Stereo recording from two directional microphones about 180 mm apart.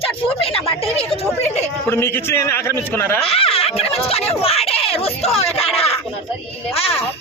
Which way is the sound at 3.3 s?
30° left (ahead or behind).